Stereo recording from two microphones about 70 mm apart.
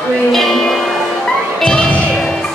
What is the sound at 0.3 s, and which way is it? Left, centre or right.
Music, centre.